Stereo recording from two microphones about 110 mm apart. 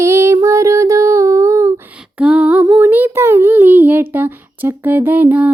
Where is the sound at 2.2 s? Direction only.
10° right (ahead or behind).